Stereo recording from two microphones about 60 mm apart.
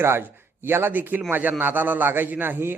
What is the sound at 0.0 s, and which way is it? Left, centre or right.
A man's voice, right.